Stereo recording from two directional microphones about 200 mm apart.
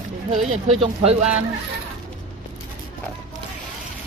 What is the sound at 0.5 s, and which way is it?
Speech, 30° right (ahead or behind).